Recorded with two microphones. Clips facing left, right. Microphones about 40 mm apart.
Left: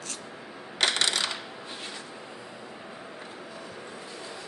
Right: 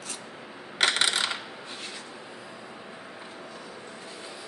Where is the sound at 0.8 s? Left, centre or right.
Centre.